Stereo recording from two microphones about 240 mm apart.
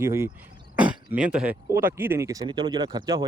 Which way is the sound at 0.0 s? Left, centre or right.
Centre.